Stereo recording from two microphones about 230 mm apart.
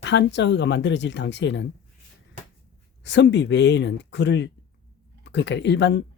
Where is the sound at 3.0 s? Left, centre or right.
Left.